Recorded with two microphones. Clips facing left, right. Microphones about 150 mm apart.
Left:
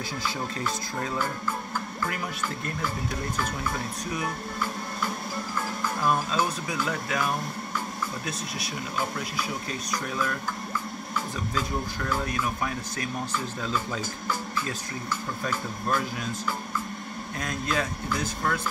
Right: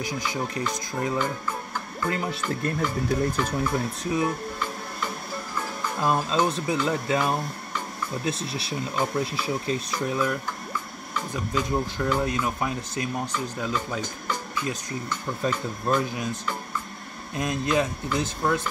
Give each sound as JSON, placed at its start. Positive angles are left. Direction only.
{"t": 0.0, "sound": "speech", "side_deg": -15}
{"t": 4.0, "sound": "speech", "side_deg": -25}
{"t": 6.0, "sound": "speech", "side_deg": -25}
{"t": 11.5, "sound": "speech", "side_deg": -20}
{"t": 15.4, "sound": "speech", "side_deg": -20}
{"t": 17.4, "sound": "speech", "side_deg": -20}